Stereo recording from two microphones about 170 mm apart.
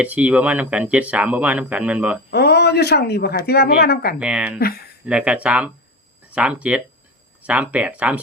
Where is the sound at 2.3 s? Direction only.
75° left (ahead or behind).